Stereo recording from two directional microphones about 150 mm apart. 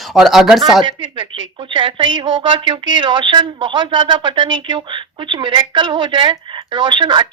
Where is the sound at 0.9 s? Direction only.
35° right (ahead or behind).